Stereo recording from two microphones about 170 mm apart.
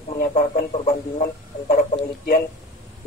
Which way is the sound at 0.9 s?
35° left (ahead or behind).